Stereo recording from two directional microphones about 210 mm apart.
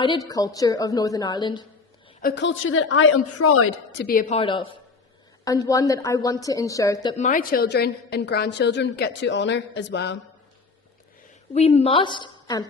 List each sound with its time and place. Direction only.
0.0 s a woman's voice: 20° left (ahead or behind)
2.2 s a woman's voice: 55° left (ahead or behind); by 3.7 s 90° left
3.9 s a woman's voice: 45° left (ahead or behind)
4.4 s a woman's voice: 25° left (ahead or behind)
7.2 s a woman's voice: 40° left (ahead or behind)
11.5 s a woman's voice: 30° left (ahead or behind)